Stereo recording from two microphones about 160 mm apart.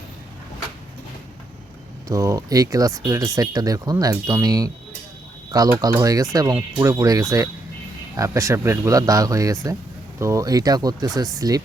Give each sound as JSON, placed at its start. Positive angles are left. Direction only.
{"t": 2.0, "sound": "speech", "side_deg": -20}